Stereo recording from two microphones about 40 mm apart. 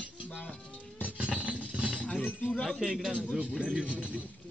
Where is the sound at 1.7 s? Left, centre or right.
Right.